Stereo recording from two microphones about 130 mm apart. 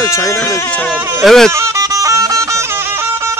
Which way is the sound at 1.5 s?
20° right (ahead or behind).